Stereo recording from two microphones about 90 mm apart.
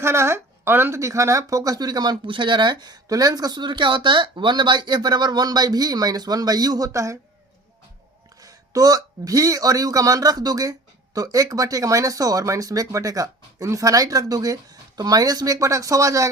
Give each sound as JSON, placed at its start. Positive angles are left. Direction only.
{"t": 0.0, "sound": "speech", "side_deg": -30}
{"t": 8.4, "sound": "speech", "side_deg": -40}